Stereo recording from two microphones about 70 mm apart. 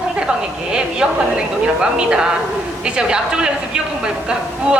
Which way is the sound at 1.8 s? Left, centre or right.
Centre.